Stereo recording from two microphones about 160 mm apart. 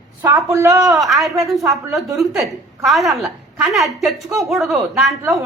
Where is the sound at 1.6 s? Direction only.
20° right (ahead or behind).